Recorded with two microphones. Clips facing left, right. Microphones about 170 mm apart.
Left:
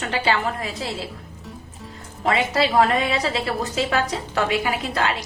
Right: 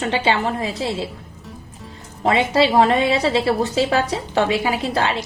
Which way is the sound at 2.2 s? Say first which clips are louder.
Right 4 dB; 25° right (ahead or behind).